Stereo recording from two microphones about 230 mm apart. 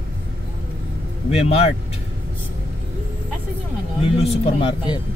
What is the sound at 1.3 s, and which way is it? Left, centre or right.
Speech, left.